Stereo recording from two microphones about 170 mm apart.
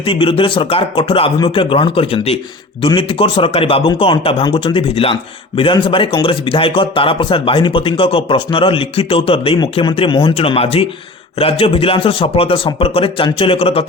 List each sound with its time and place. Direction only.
0.0 s speech: 30° left (ahead or behind)